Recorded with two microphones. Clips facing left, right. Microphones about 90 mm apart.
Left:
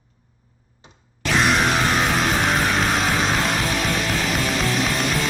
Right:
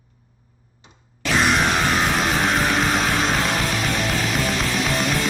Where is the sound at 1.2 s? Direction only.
Centre (ahead or behind).